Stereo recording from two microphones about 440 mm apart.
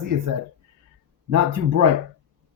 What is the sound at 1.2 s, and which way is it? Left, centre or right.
Speech, right.